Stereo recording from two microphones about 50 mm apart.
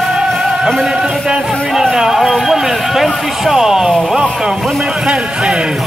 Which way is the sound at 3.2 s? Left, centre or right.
Centre.